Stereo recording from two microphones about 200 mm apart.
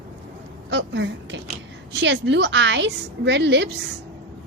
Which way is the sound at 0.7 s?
65° right (ahead or behind).